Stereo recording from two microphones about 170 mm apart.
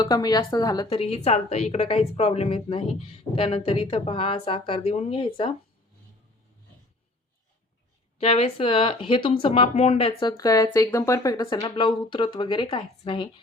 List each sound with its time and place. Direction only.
0.0 s speech: 25° left (ahead or behind)
8.2 s speech: 35° left (ahead or behind)